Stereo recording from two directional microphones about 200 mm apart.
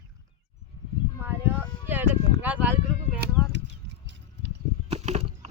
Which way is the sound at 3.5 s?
60° right (ahead or behind).